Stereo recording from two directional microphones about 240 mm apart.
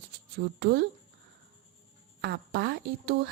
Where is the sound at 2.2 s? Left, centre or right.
Right.